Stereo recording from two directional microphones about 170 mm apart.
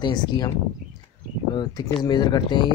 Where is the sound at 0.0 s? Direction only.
25° left (ahead or behind).